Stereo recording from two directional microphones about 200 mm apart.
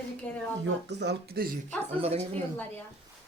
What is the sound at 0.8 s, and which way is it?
Speech, 60° right (ahead or behind).